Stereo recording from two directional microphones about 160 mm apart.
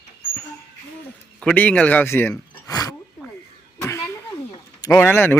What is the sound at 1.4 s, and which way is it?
Speech, 5° left (ahead or behind).